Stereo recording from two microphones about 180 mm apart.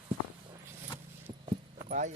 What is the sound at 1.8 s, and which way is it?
Speech, 45° right (ahead or behind).